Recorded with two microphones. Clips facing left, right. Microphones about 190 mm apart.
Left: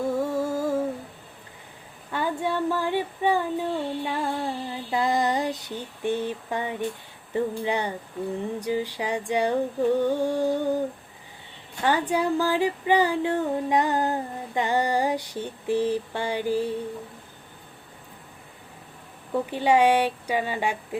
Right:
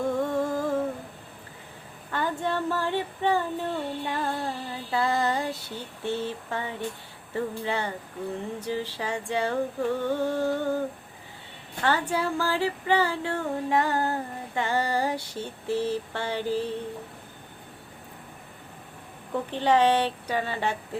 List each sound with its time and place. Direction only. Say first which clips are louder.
0.0 s humming: left 1 dB; 5° left (ahead or behind)
2.1 s female singing: left 2 dB; 10° left (ahead or behind)
19.3 s female singing: left 2 dB; 10° left (ahead or behind)